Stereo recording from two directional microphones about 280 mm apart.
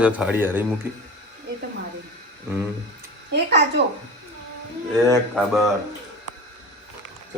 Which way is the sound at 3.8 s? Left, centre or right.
Right.